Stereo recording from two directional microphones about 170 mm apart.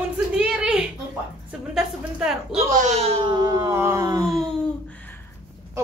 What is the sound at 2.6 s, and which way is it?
Speech, 45° right (ahead or behind).